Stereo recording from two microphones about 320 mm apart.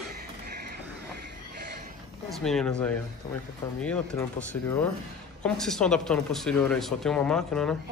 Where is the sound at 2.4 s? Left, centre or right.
Centre.